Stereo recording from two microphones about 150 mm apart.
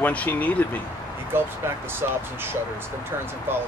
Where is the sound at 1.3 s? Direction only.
15° right (ahead or behind).